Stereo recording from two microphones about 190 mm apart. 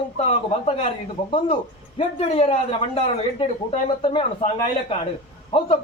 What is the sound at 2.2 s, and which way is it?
A man's voice, 35° left (ahead or behind).